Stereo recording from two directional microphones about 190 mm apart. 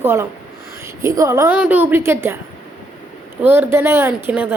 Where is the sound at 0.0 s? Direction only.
15° right (ahead or behind).